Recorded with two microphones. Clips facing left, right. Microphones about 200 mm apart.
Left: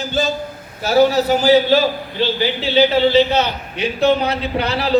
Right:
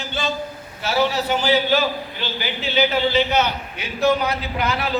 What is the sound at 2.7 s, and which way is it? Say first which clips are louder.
A man's voice: left 6 dB; 30° left (ahead or behind).